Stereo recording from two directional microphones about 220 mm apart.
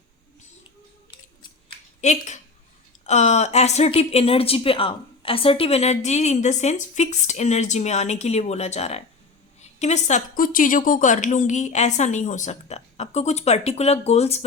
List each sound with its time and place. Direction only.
2.0 s a woman's voice: 35° left (ahead or behind)